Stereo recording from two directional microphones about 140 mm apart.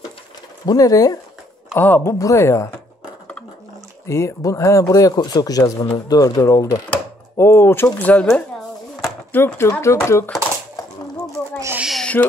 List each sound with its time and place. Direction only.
0.7 s speech: 25° left (ahead or behind)
4.0 s speech: 20° left (ahead or behind)
11.8 s owl: centre (ahead or behind)